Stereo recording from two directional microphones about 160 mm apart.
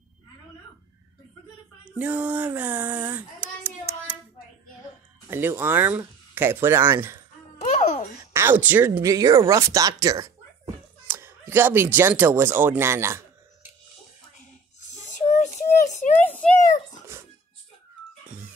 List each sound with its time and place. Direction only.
1.9 s child singing: 10° right (ahead or behind)
5.3 s speech: 15° right (ahead or behind)
7.6 s babbling: 45° left (ahead or behind)
8.3 s speech: 15° right (ahead or behind)
14.9 s a sound: 45° left (ahead or behind)
16.2 s a sound: 10° left (ahead or behind)